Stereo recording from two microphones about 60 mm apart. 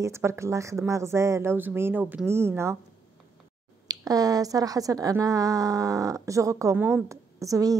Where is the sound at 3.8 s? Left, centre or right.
Right.